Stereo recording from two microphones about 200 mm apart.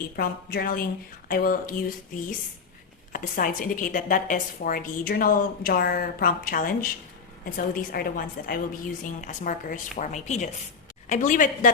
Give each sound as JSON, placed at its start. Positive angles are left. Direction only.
{"t": 0.2, "sound": "a woman's voice", "side_deg": 45}
{"t": 3.1, "sound": "a woman's voice", "side_deg": 45}